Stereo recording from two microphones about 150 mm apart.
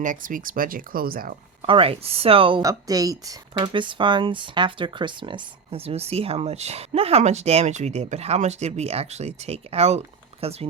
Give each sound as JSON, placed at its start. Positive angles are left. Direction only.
{"t": 0.0, "sound": "speech", "side_deg": -60}
{"t": 1.6, "sound": "speech", "side_deg": -35}
{"t": 2.6, "sound": "speech", "side_deg": -25}